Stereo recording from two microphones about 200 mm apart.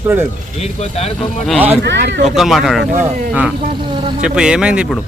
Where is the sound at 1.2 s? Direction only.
5° left (ahead or behind).